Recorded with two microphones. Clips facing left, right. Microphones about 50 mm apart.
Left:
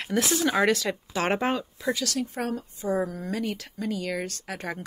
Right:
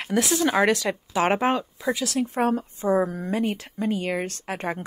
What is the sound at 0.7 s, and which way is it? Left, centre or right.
Speech, centre.